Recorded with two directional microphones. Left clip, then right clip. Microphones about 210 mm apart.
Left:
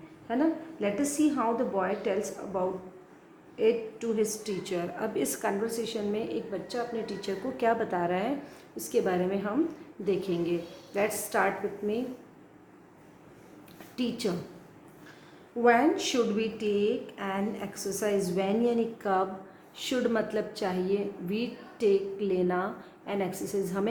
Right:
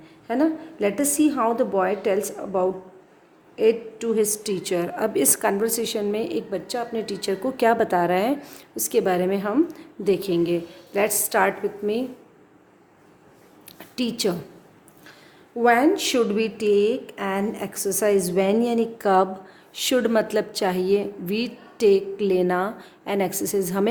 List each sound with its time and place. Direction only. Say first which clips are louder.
0.3 s a woman's voice: right 6 dB; 50° right (ahead or behind)
13.9 s a woman's voice: right 7 dB; 50° right (ahead or behind)
15.6 s a woman's voice: right 5 dB; 50° right (ahead or behind)